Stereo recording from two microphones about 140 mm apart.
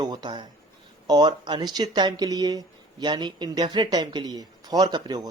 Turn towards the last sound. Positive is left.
turn(degrees=-30)  # may be behind; listen again after turning